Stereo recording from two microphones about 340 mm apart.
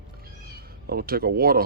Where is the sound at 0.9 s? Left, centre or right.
Right.